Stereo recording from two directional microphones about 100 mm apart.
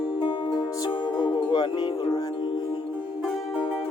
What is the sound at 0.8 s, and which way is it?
Music, 50° left (ahead or behind).